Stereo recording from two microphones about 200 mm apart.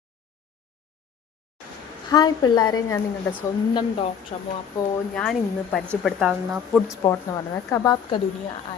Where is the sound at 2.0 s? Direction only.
20° left (ahead or behind).